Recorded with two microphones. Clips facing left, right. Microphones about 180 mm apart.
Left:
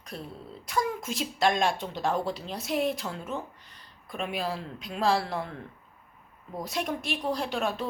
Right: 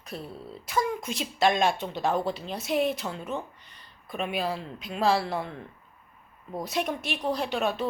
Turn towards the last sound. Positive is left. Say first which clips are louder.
# right 2 dB
turn(degrees=0)  # may be behind; listen again after turning